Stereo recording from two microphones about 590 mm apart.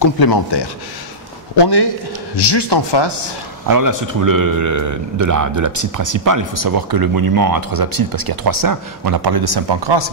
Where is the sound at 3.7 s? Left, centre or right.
Right.